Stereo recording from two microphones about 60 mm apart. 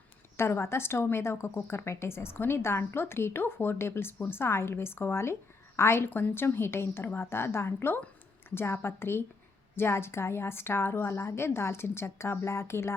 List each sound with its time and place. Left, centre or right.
0.3 s a woman's voice: left
6.1 s a woman's voice: left